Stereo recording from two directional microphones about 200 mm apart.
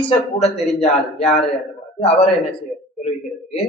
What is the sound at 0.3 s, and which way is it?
Speech, 30° left (ahead or behind).